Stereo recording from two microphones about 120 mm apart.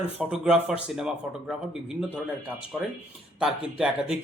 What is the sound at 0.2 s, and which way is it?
Speech, 5° right (ahead or behind).